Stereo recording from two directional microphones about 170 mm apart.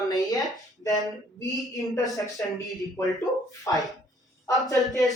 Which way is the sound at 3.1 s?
20° left (ahead or behind).